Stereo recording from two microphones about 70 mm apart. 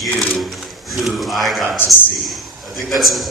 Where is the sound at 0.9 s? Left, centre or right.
Centre.